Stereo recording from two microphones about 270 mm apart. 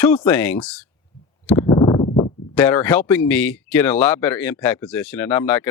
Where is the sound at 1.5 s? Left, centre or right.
Centre.